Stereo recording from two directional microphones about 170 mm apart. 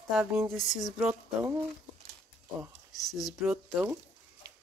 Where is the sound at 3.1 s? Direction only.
Centre (ahead or behind).